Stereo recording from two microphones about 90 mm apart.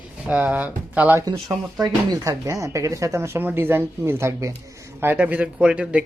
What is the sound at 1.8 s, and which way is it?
Speech, 40° right (ahead or behind).